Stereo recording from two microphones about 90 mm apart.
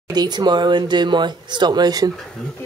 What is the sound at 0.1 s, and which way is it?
Speech, 50° right (ahead or behind).